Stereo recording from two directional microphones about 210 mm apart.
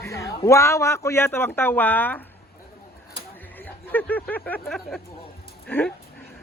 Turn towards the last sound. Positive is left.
turn(degrees=5)  # may be behind; listen again after turning